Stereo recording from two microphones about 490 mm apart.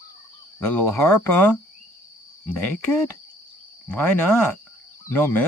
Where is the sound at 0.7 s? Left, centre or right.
Centre.